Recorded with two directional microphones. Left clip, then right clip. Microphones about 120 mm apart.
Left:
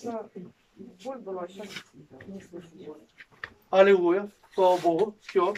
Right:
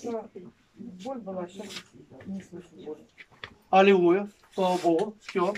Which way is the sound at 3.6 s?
15° right (ahead or behind).